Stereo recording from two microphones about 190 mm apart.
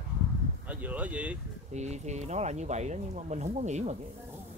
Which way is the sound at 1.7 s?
35° right (ahead or behind).